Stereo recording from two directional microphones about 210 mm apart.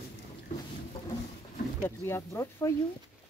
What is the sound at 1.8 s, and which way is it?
Speech, 15° left (ahead or behind).